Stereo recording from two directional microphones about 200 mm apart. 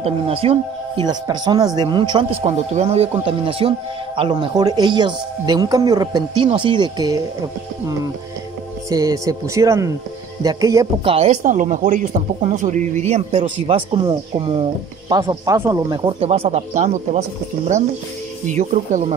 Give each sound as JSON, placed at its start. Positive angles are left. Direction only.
{"t": 0.0, "sound": "speech", "side_deg": -30}
{"t": 8.9, "sound": "speech", "side_deg": -15}
{"t": 11.1, "sound": "speech", "side_deg": -30}
{"t": 18.5, "sound": "speech", "side_deg": -40}